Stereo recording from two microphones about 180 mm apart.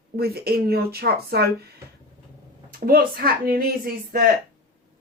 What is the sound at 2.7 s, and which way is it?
Speech, 55° right (ahead or behind).